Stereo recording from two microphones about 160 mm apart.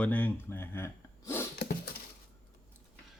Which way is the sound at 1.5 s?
70° left (ahead or behind).